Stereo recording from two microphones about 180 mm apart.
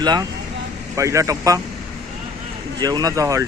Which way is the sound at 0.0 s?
25° right (ahead or behind).